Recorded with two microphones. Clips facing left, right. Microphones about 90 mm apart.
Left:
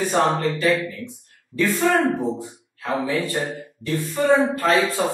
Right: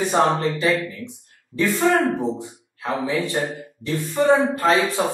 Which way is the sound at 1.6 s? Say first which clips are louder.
Even; 20° right (ahead or behind).